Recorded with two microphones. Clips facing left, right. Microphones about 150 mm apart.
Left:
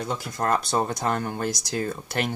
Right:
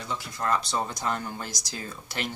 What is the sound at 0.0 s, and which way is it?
Speech, 50° left (ahead or behind).